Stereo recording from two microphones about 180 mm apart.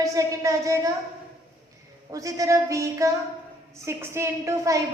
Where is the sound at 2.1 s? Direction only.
15° right (ahead or behind).